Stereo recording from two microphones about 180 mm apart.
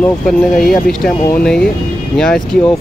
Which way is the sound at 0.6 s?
Centre (ahead or behind).